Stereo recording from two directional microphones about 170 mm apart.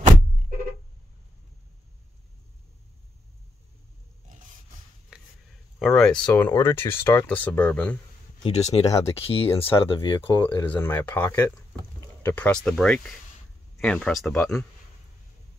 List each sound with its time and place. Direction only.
5.8 s speech: centre (ahead or behind)
8.5 s speech: 40° left (ahead or behind)
10.7 s speech: 10° left (ahead or behind)